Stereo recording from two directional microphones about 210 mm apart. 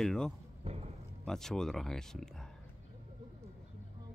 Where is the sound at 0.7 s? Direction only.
30° right (ahead or behind).